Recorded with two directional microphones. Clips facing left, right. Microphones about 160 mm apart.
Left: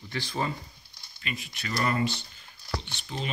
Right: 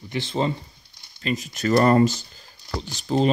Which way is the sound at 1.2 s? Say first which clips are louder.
Right 13 dB; 40° right (ahead or behind).